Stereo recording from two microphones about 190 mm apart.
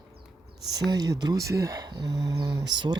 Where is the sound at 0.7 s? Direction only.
20° right (ahead or behind).